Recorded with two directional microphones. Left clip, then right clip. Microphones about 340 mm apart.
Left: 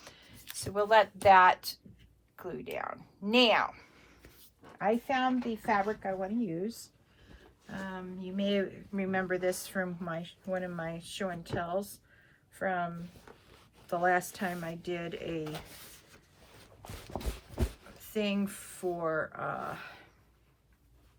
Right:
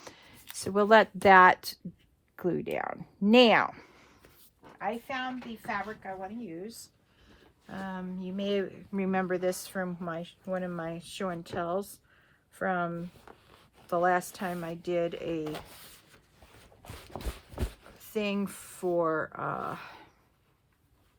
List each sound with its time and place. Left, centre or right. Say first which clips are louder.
0.0 s a sound: right 3 dB; right
0.5 s speech: right 3 dB; right
4.6 s a woman's voice: left 4 dB; centre
7.3 s speech: right 1 dB; centre
17.1 s a sound: left 1 dB; centre
18.0 s speech: right 1 dB; centre